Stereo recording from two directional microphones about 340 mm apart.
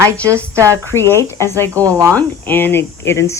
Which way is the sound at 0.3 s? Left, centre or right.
Centre.